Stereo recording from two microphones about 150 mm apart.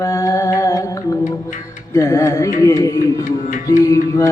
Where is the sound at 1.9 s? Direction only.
20° left (ahead or behind).